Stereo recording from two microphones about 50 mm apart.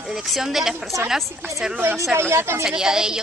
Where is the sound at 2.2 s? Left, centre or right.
Right.